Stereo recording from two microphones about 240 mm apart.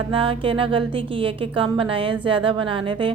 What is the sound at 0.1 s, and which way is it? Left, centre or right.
A woman's voice, right.